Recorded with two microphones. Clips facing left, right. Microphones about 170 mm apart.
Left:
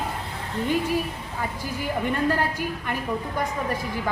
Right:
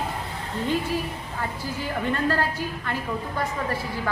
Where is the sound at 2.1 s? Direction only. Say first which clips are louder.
Even; 15° left (ahead or behind).